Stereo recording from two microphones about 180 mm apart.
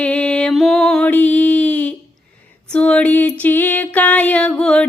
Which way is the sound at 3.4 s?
10° left (ahead or behind).